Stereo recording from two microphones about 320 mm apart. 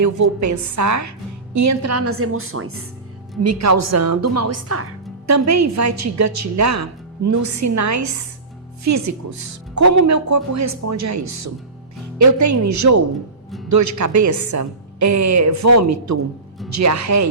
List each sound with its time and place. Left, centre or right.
0.0 s a woman's voice: right
3.4 s speech: right